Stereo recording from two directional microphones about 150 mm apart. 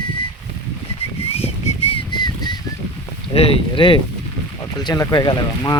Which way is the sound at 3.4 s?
35° left (ahead or behind).